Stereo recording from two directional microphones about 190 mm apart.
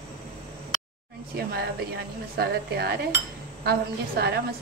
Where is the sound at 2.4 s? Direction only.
55° right (ahead or behind).